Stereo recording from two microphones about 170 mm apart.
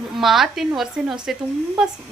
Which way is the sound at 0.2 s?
Centre (ahead or behind).